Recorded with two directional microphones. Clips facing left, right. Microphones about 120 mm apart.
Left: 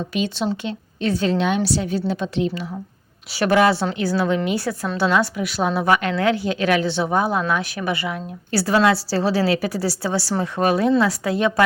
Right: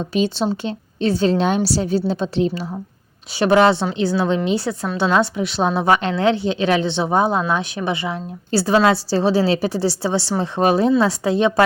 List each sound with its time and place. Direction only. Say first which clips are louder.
0.1 s a woman's voice: right 5 dB; 30° right (ahead or behind)